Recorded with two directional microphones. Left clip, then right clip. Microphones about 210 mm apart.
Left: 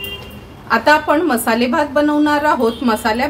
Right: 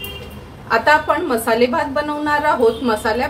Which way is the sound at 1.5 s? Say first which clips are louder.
Right 1 dB; 35° left (ahead or behind).